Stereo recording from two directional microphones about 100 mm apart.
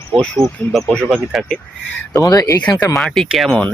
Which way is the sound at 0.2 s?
5° left (ahead or behind).